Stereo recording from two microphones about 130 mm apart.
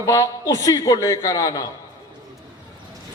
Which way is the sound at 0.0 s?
25° left (ahead or behind).